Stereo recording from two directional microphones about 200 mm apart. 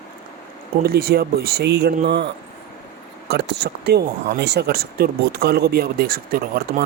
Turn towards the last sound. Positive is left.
turn(degrees=-45)  # may be behind; listen again after turning